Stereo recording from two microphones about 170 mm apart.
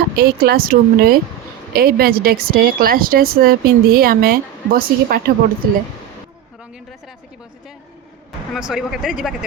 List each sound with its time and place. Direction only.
0.2 s speech: 65° right (ahead or behind)
8.5 s speech: 5° right (ahead or behind)